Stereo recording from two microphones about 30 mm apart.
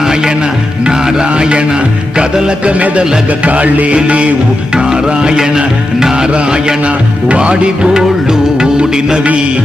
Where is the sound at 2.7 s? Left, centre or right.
Right.